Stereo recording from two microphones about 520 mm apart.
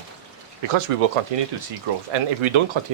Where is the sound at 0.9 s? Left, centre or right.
Right.